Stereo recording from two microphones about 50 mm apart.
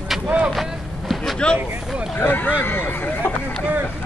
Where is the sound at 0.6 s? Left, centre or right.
Centre.